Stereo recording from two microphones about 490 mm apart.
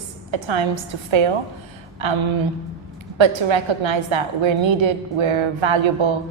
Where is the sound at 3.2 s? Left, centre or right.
Right.